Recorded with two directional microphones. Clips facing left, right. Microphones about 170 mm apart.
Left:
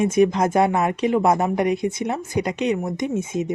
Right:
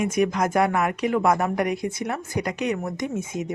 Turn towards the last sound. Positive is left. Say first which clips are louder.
# left 4 dB
turn(degrees=20)  # may be behind; listen again after turning